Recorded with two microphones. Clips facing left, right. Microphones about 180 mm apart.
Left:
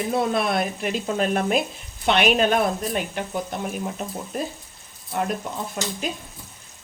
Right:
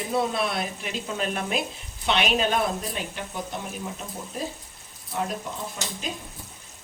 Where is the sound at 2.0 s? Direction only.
55° left (ahead or behind).